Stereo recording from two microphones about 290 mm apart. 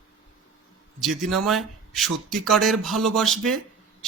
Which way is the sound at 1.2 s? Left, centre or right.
Centre.